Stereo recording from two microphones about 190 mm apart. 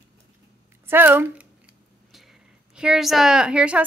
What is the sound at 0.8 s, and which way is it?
Speech, 10° right (ahead or behind).